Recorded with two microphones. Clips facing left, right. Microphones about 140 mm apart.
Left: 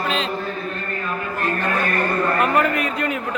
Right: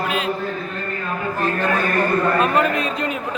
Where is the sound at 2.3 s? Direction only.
20° right (ahead or behind).